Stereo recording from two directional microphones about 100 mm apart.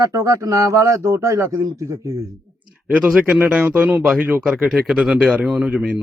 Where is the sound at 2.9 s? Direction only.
10° right (ahead or behind).